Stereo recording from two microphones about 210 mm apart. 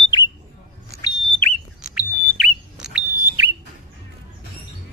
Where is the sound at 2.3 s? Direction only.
5° right (ahead or behind).